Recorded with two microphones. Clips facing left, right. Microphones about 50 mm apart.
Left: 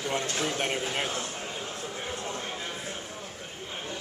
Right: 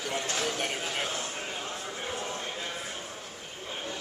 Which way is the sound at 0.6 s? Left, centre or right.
Centre.